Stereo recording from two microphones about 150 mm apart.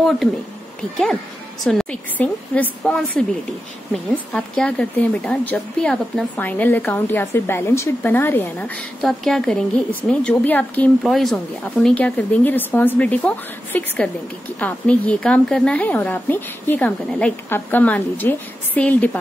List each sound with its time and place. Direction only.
1.6 s a woman's voice: 5° left (ahead or behind)